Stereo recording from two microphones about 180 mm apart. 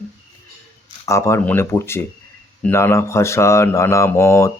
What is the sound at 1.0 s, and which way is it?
Speech, 15° left (ahead or behind).